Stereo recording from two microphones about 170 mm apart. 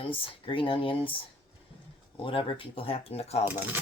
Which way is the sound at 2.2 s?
30° left (ahead or behind).